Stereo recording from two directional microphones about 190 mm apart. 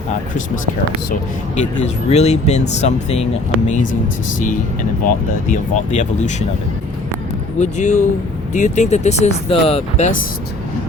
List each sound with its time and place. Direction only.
1.5 s speech: 35° left (ahead or behind)
5.0 s speech: 40° left (ahead or behind)
7.6 s speech: 40° left (ahead or behind)